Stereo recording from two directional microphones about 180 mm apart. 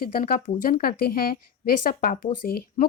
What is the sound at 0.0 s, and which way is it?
A woman's voice, 55° left (ahead or behind).